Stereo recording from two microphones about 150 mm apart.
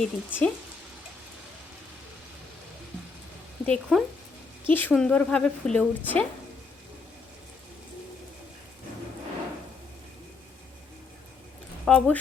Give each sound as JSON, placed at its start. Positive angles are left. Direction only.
{"t": 0.0, "sound": "speech", "side_deg": 10}
{"t": 3.7, "sound": "speech", "side_deg": 0}
{"t": 4.6, "sound": "speech", "side_deg": 15}
{"t": 11.9, "sound": "speech", "side_deg": 10}